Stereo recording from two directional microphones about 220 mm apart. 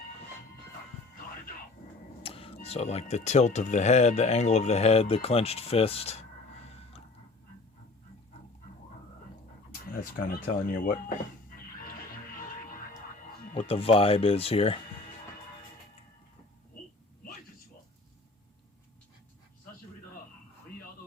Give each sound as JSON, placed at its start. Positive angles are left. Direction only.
{"t": 2.2, "sound": "speech", "side_deg": 25}
{"t": 6.7, "sound": "a sound", "side_deg": 25}
{"t": 10.2, "sound": "speech", "side_deg": 40}
{"t": 13.5, "sound": "speech", "side_deg": 25}